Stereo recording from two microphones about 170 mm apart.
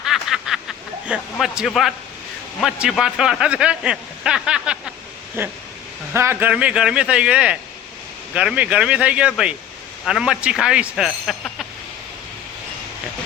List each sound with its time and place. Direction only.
0.0 s snicker: centre (ahead or behind)
1.0 s a man's voice: 5° right (ahead or behind)